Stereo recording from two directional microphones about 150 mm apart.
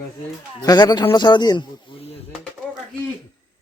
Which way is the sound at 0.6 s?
25° left (ahead or behind).